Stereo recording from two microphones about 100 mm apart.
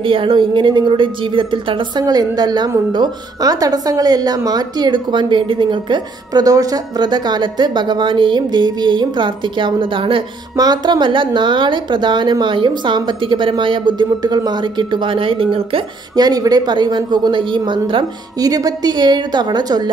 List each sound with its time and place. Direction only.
0.0 s a woman's voice: 60° right (ahead or behind)
2.0 s a woman's voice: 40° right (ahead or behind)
6.4 s a woman's voice: 35° right (ahead or behind); by 10.2 s 60° right (ahead or behind)
10.5 s a woman's voice: 45° right (ahead or behind); by 15.4 s 60° right (ahead or behind)
16.2 s a woman's voice: 40° right (ahead or behind); by 18.0 s 55° right (ahead or behind)
18.4 s a woman's voice: 40° right (ahead or behind)